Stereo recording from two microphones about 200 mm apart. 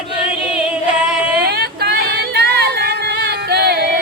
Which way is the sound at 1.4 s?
50° right (ahead or behind).